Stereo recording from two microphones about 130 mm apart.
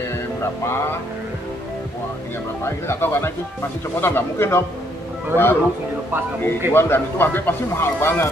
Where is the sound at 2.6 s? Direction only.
20° left (ahead or behind).